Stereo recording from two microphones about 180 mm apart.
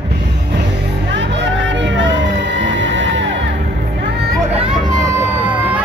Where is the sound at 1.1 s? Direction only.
80° right.